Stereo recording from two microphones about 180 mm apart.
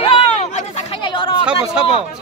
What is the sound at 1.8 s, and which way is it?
Speech, 5° right (ahead or behind).